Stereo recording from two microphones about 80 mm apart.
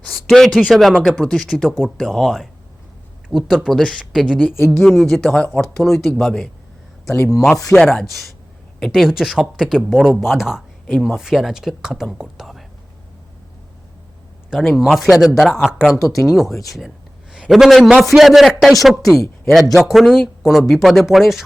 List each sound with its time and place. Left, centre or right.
0.3 s speech: centre
3.7 s speech: centre
7.1 s speech: left
7.7 s speech: centre
8.8 s speech: centre
14.5 s speech: centre
16.2 s speech: centre